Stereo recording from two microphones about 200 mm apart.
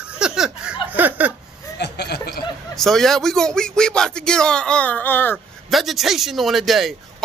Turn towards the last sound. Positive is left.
turn(degrees=0)  # may be behind; listen again after turning